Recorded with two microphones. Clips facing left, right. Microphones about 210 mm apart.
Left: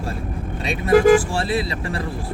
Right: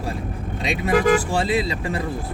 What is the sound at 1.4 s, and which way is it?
Speech, 20° right (ahead or behind).